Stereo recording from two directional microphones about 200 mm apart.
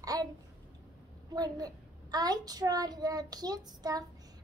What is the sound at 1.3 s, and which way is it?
A child's voice, 20° right (ahead or behind).